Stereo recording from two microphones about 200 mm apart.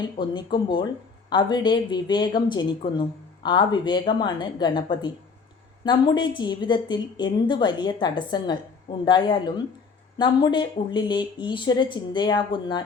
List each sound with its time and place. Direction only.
0.2 s a woman's voice: 20° left (ahead or behind)